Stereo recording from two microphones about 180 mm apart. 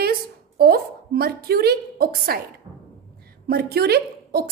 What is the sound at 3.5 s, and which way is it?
A woman's voice, 65° right (ahead or behind).